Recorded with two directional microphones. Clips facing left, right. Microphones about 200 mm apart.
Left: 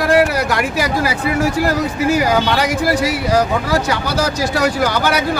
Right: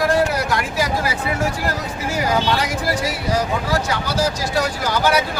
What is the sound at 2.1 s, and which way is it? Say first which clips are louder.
Speech: left 1 dB; 75° left (ahead or behind).